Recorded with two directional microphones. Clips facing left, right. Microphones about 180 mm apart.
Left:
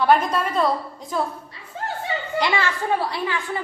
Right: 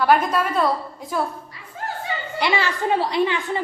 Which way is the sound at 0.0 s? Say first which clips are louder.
Even; centre (ahead or behind).